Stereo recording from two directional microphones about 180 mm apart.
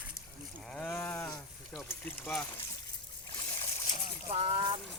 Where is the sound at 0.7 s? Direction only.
10° left (ahead or behind).